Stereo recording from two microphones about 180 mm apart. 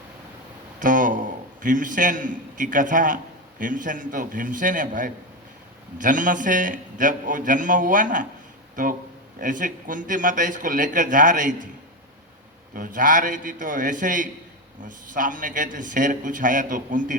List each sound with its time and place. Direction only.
0.8 s a sound: 45° right (ahead or behind)
1.6 s a man's voice: 45° right (ahead or behind)
12.7 s a man's voice: 50° right (ahead or behind)